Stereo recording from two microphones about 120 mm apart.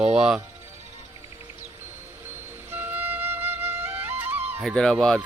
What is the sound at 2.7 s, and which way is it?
Music, 15° right (ahead or behind).